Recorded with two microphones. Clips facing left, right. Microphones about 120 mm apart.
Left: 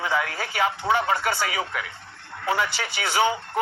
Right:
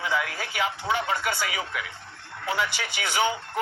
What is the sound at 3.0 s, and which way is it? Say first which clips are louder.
Speech: left 3 dB; 35° left (ahead or behind).